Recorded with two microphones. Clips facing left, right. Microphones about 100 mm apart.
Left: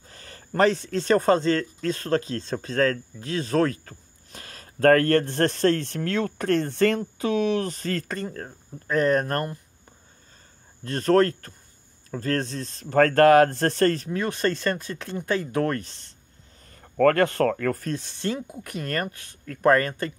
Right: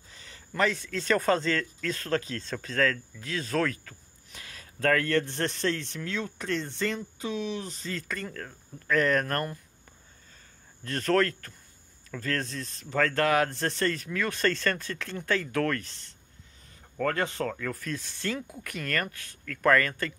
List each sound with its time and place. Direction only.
0.1 s speech: 50° left (ahead or behind)
8.1 s speech: 30° left (ahead or behind)
10.8 s speech: 25° left (ahead or behind)
12.9 s speech: 50° left (ahead or behind)
14.0 s speech: 25° left (ahead or behind)
16.8 s speech: 55° left (ahead or behind)
17.8 s speech: 25° left (ahead or behind)